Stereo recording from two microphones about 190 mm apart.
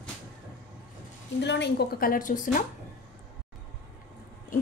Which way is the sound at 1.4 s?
65° left (ahead or behind).